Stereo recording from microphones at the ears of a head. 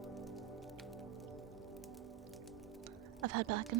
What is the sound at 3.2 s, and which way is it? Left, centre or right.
Speech, right.